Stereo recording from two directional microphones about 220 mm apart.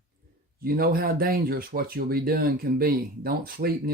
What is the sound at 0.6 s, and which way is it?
Speech, 40° right (ahead or behind).